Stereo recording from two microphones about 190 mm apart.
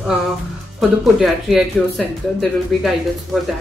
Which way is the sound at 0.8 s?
Centre (ahead or behind).